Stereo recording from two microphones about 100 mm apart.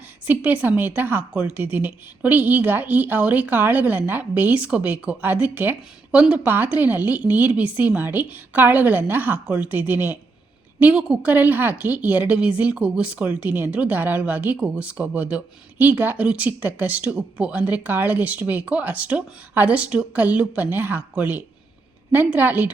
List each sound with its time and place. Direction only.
0.3 s a woman's voice: 15° right (ahead or behind)